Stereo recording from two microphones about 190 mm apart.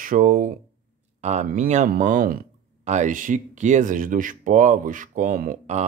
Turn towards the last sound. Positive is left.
turn(degrees=-45)  # may be behind; listen again after turning